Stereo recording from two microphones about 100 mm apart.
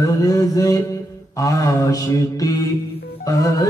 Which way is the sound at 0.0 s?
35° left (ahead or behind).